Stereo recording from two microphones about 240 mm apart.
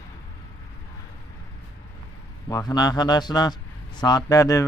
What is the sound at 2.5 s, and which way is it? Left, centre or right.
Speech, centre.